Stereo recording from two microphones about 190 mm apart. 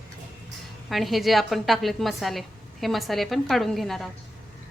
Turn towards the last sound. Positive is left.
turn(degrees=0)  # may be behind; listen again after turning